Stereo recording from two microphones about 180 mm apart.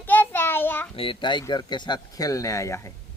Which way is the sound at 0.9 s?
30° left (ahead or behind).